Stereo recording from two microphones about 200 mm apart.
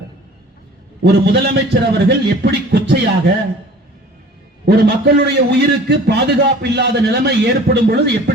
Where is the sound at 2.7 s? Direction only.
55° right (ahead or behind).